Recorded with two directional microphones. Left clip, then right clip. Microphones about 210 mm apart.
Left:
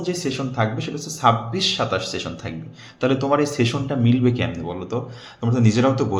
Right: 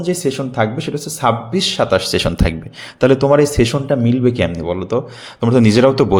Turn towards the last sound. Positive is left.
turn(degrees=-45)  # may be behind; listen again after turning